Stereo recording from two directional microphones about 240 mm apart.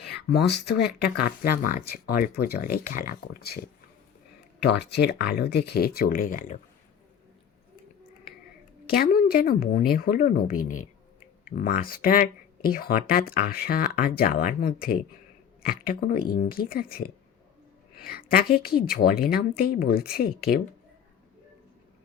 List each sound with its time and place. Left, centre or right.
0.0 s speech: left
4.6 s speech: left
8.9 s speech: left